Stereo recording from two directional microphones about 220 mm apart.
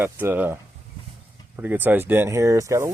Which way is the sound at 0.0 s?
10° right (ahead or behind).